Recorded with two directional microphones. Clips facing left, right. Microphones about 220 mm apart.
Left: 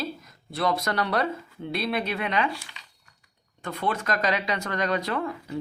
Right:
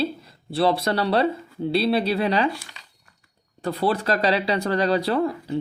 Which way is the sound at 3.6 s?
35° right (ahead or behind).